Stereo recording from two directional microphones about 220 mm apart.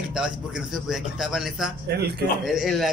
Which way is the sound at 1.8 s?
45° right (ahead or behind).